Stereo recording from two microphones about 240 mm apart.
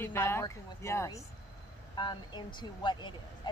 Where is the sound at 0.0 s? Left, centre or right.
Centre.